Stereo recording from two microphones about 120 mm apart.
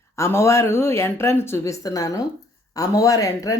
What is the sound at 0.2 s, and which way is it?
Speech, 25° left (ahead or behind).